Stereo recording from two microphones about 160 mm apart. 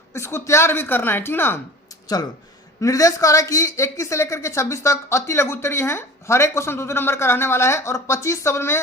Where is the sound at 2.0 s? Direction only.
25° left (ahead or behind).